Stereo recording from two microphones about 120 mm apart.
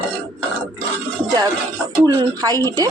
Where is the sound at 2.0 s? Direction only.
30° right (ahead or behind).